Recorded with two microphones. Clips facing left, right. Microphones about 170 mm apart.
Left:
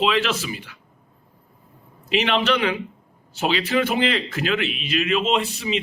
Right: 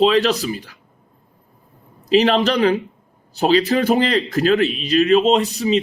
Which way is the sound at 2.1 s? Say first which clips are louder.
Right 6 dB; 40° right (ahead or behind).